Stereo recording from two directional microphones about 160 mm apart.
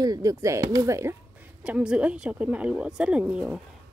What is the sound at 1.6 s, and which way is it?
Speech, 5° right (ahead or behind).